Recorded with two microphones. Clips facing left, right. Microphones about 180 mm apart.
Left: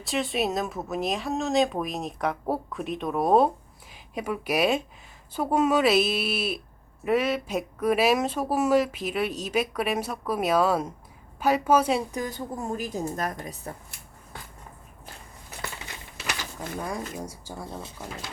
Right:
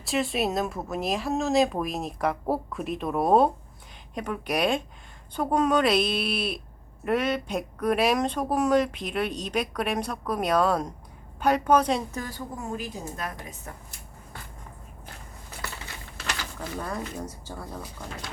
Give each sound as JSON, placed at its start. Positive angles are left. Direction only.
{"t": 0.0, "sound": "a woman's voice", "side_deg": 0}
{"t": 12.7, "sound": "a woman's voice", "side_deg": 45}
{"t": 16.4, "sound": "a woman's voice", "side_deg": 10}
{"t": 17.7, "sound": "speech", "side_deg": 25}